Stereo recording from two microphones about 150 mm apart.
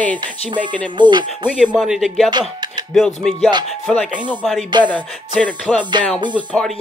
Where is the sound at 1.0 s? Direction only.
30° right (ahead or behind).